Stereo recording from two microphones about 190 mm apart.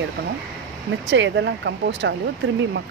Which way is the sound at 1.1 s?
70° right (ahead or behind).